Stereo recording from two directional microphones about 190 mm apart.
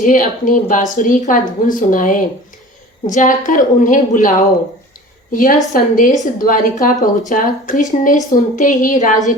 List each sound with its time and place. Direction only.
0.0 s a woman's voice: 45° left (ahead or behind)